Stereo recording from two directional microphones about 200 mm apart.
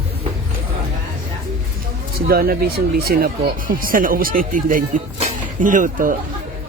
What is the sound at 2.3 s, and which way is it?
Speech, 50° right (ahead or behind).